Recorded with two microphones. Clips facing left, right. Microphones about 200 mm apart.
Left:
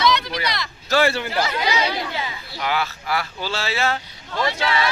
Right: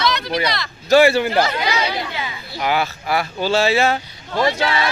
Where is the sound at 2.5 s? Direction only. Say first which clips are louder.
Right 5 dB; 15° right (ahead or behind).